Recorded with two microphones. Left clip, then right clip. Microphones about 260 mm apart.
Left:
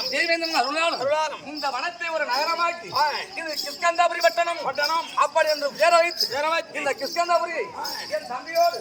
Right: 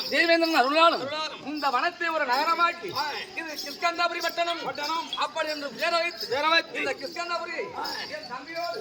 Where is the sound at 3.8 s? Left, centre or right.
Centre.